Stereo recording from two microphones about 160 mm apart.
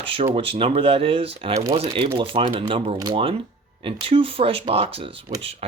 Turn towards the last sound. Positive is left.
turn(degrees=-40)  # may be behind; listen again after turning